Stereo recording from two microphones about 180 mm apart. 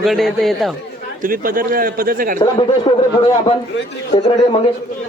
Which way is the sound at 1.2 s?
50° right (ahead or behind).